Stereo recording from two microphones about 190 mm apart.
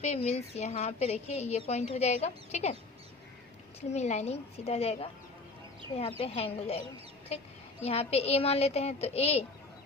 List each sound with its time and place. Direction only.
0.0 s speech: 35° left (ahead or behind)
3.8 s speech: 35° left (ahead or behind)
7.9 s speech: 30° left (ahead or behind)